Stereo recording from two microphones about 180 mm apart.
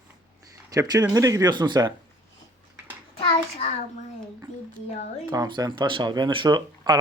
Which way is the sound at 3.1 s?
35° left (ahead or behind).